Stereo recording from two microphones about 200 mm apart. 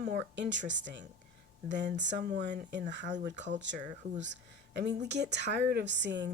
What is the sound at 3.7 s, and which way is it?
Speech, 65° right (ahead or behind).